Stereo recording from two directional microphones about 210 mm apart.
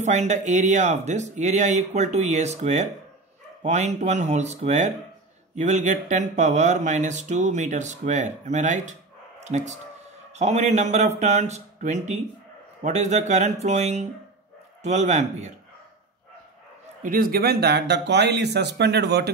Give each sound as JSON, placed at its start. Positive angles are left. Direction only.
{"t": 0.0, "sound": "speech", "side_deg": -35}
{"t": 17.0, "sound": "speech", "side_deg": -40}